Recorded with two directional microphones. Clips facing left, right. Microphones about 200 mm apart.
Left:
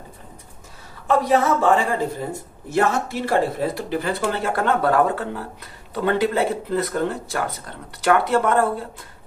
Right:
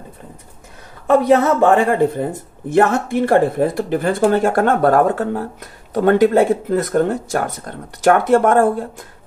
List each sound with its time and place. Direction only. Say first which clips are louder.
1.6 s speech: right 6 dB; 55° right (ahead or behind)